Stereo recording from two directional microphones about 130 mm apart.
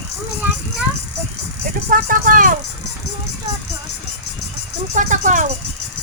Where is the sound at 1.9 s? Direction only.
90° right.